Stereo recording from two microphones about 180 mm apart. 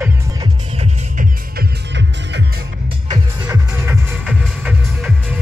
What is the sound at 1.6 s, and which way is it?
Music, 75° right (ahead or behind).